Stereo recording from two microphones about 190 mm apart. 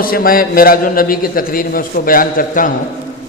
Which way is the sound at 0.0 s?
50° left (ahead or behind).